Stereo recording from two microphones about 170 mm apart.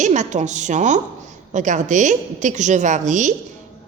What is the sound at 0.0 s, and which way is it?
Speech, 45° right (ahead or behind).